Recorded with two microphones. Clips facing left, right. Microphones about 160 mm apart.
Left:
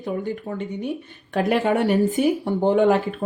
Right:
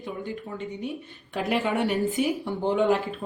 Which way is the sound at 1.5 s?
45° left (ahead or behind).